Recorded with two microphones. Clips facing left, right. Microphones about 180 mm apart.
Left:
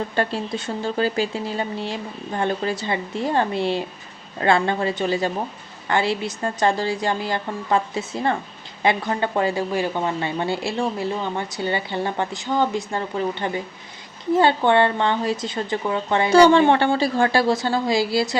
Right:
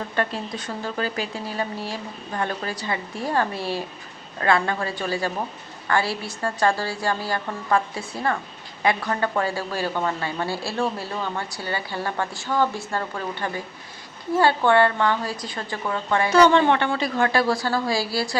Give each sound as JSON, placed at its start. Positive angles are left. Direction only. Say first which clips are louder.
{"t": 0.2, "sound": "a woman's voice", "louder": "left 2 dB", "side_deg": 30}